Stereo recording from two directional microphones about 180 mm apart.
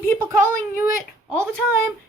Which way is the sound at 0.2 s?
15° right (ahead or behind).